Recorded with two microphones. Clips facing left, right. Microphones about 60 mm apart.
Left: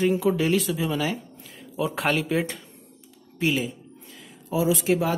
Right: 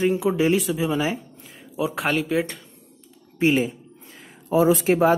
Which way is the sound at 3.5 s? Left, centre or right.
Right.